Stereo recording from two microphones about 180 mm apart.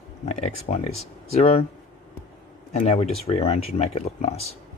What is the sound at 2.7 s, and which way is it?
Speech, 35° left (ahead or behind).